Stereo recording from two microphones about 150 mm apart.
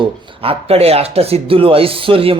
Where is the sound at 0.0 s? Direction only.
35° right (ahead or behind).